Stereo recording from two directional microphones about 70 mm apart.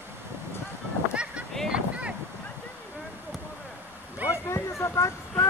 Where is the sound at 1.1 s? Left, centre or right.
Centre.